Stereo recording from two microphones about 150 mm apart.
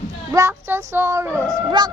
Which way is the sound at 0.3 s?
20° right (ahead or behind).